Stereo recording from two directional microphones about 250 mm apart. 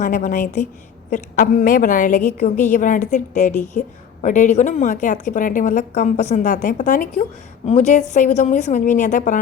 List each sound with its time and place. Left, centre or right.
0.0 s a woman's voice: left